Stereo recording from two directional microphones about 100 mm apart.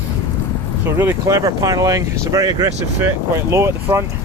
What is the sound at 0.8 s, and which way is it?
Speech, 25° right (ahead or behind).